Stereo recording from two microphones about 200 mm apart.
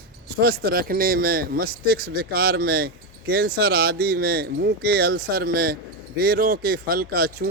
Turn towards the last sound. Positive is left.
turn(degrees=-50)  # may be behind; listen again after turning